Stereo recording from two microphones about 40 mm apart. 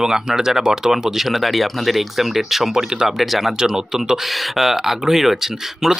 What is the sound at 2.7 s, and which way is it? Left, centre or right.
Speech, centre.